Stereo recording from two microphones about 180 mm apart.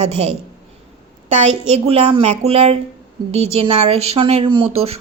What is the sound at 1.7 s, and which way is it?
Speech, 35° right (ahead or behind).